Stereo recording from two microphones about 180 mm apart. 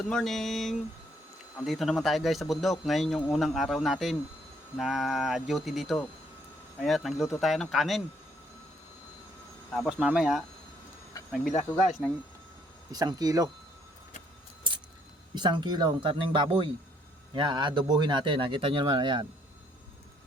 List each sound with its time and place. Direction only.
0.1 s speech: centre (ahead or behind)
9.7 s speech: 5° right (ahead or behind)
11.9 s speech: 5° right (ahead or behind)
12.9 s speech: 20° right (ahead or behind)
14.7 s a sound: 25° right (ahead or behind)
15.4 s speech: 25° right (ahead or behind)